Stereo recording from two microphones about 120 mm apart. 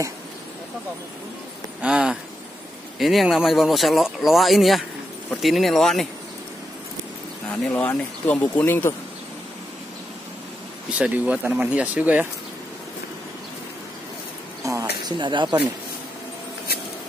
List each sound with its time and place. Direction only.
1.8 s speech: 5° right (ahead or behind)
7.4 s speech: 10° left (ahead or behind)
10.9 s speech: 10° right (ahead or behind)
14.6 s a sound: 25° right (ahead or behind)
15.1 s speech: 40° right (ahead or behind)